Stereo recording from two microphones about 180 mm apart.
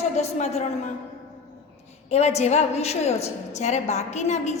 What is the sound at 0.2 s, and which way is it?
Speech, 40° left (ahead or behind).